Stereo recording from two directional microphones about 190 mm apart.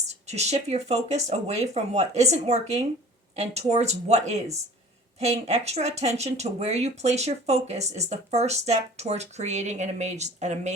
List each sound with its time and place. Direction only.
0.1 s speech: 35° right (ahead or behind)